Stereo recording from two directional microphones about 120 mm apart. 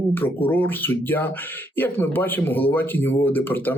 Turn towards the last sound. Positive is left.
turn(degrees=15)  # may be behind; listen again after turning